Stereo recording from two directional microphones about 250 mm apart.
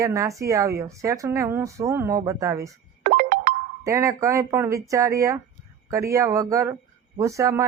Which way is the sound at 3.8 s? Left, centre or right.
Centre.